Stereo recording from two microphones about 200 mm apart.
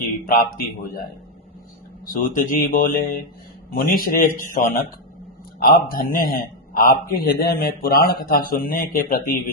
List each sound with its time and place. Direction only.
0.3 s a man's voice: 45° left (ahead or behind)
2.2 s a man's voice: 40° left (ahead or behind)